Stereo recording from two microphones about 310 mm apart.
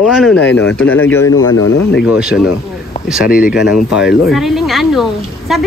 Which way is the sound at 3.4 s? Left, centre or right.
Centre.